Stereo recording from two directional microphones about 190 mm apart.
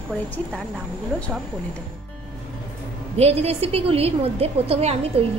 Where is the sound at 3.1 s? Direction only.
35° right (ahead or behind).